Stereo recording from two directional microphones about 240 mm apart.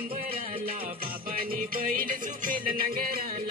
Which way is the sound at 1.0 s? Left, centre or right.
Right.